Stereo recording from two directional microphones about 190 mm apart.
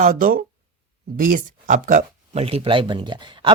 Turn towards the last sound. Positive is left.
turn(degrees=-25)  # may be behind; listen again after turning